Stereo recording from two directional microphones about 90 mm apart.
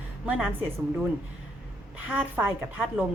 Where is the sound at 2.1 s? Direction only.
20° right (ahead or behind).